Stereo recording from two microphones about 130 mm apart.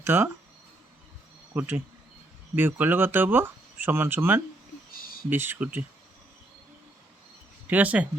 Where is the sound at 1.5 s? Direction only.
15° right (ahead or behind).